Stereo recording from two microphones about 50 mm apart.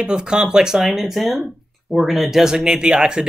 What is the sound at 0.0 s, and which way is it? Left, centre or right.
Speech, centre.